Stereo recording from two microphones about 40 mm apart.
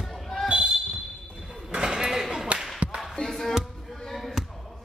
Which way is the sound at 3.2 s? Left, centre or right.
Left.